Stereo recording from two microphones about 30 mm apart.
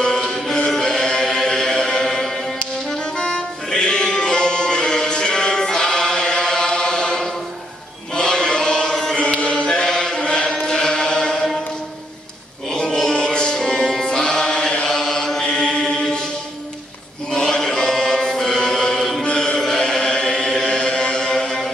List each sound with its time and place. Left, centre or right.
0.0 s music: left
8.1 s chant: left
12.7 s music: left
14.9 s chant: centre
15.4 s chant: left
17.3 s chant: left
19.2 s music: left
19.6 s chant: left